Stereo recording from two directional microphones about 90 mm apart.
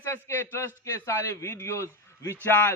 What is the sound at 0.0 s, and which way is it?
A man's voice, 30° left (ahead or behind).